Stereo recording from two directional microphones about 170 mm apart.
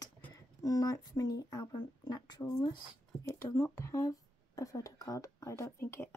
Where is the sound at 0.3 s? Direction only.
20° left (ahead or behind).